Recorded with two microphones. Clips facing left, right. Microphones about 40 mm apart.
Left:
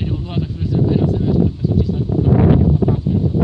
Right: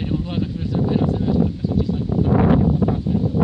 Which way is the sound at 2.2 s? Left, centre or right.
Centre.